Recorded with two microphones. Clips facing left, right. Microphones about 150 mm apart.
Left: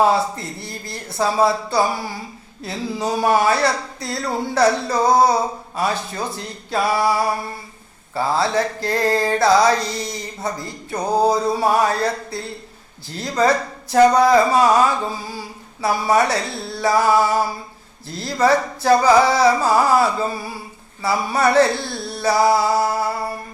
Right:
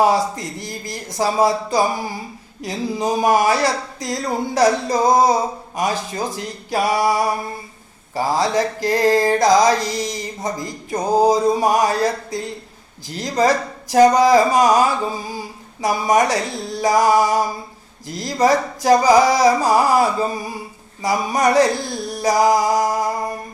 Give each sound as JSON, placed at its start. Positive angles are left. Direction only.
{"t": 1.1, "sound": "speech", "side_deg": -15}
{"t": 13.9, "sound": "speech", "side_deg": -15}
{"t": 15.8, "sound": "speech", "side_deg": -15}